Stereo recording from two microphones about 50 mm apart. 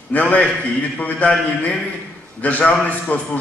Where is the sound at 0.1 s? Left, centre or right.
Left.